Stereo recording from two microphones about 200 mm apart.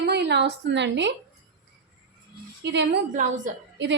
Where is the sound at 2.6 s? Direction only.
60° right (ahead or behind).